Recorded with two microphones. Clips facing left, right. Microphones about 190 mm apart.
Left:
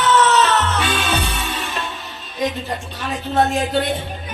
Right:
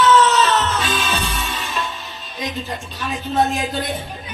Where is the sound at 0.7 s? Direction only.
65° left (ahead or behind).